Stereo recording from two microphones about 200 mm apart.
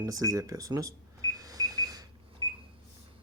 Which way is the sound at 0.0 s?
15° right (ahead or behind).